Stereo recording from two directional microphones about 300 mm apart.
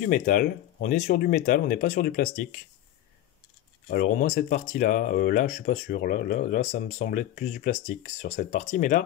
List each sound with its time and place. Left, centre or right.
0.0 s speech: left
3.9 s speech: left